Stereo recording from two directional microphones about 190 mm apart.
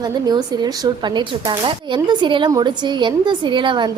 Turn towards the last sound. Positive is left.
turn(degrees=-25)  # may be behind; listen again after turning